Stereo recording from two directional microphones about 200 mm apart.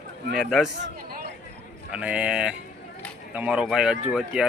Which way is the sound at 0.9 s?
45° right (ahead or behind).